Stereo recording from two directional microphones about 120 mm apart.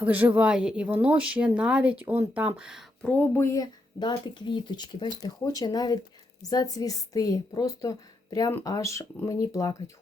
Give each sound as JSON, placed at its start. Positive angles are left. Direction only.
{"t": 0.0, "sound": "speech", "side_deg": -15}
{"t": 3.0, "sound": "a woman's voice", "side_deg": 15}
{"t": 4.0, "sound": "a woman's voice", "side_deg": 40}